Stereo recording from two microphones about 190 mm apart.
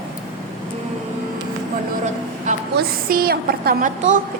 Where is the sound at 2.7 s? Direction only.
55° right (ahead or behind).